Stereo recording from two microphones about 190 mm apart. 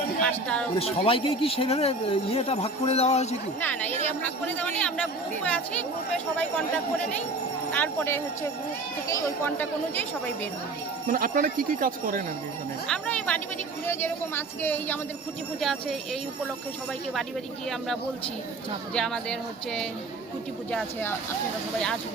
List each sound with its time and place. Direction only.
0.2 s speech: 5° left (ahead or behind)
0.8 s speech: 30° left (ahead or behind)
3.6 s speech: 10° left (ahead or behind)
7.7 s speech: 10° left (ahead or behind)
11.1 s speech: 45° right (ahead or behind)
12.9 s speech: 5° left (ahead or behind)
18.9 s speech: 5° left (ahead or behind)